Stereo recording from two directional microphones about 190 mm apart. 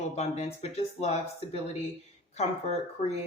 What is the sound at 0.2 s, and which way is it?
Speech, 35° left (ahead or behind).